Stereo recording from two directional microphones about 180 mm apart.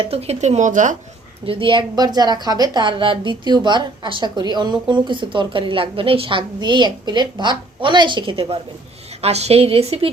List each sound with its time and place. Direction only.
0.0 s speech: 35° right (ahead or behind)
1.5 s a woman's voice: 30° right (ahead or behind)